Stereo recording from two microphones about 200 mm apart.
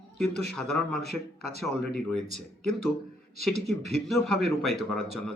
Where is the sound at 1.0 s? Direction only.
50° left (ahead or behind).